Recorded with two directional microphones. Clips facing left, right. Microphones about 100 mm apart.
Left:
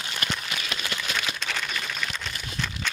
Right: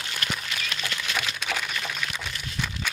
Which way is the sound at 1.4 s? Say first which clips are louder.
Right 1 dB; 10° right (ahead or behind).